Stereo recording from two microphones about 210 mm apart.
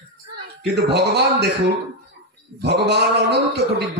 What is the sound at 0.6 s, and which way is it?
Speech, 50° right (ahead or behind).